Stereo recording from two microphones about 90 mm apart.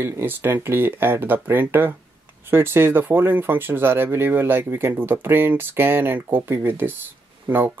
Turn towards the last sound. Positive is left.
turn(degrees=-20)  # may be behind; listen again after turning